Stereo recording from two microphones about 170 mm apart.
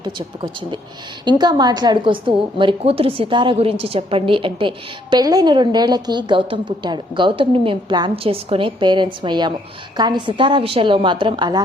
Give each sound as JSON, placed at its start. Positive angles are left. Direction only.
{"t": 0.0, "sound": "a woman's voice", "side_deg": -30}